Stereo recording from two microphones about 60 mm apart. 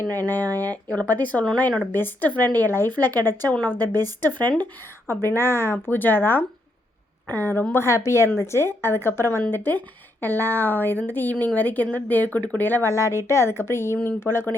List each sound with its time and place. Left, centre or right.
0.1 s speech: left
3.5 s speech: left
4.3 s a woman's voice: left
9.5 s speech: left
12.9 s a woman's voice: left